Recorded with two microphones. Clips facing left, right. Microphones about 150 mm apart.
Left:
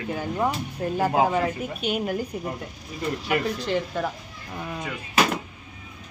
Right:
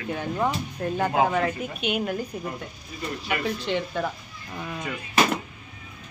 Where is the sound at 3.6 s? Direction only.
5° left (ahead or behind).